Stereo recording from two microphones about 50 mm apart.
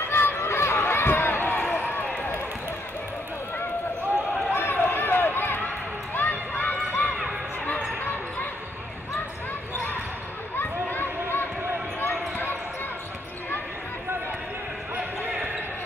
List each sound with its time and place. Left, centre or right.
0.1 s run: left
4.5 s run: left
10.6 s a sound: left
12.0 s basketball bounce: left